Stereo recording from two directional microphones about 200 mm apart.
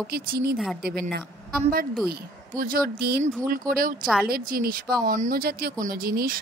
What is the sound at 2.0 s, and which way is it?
A woman's voice, 45° right (ahead or behind).